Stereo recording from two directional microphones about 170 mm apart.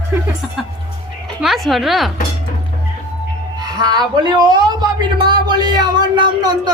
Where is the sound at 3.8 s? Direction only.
25° right (ahead or behind).